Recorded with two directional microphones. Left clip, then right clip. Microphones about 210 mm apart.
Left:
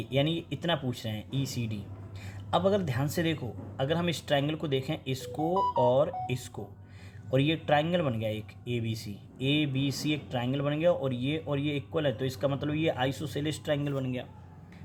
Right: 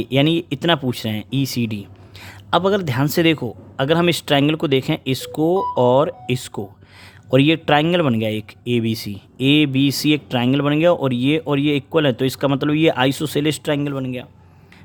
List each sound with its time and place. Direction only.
0.0 s speech: 45° right (ahead or behind)